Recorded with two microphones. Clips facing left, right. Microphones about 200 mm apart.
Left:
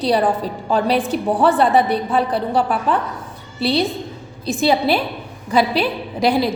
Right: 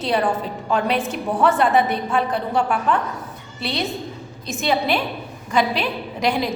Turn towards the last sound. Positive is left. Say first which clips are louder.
# left 4 dB
turn(degrees=35)  # may be behind; listen again after turning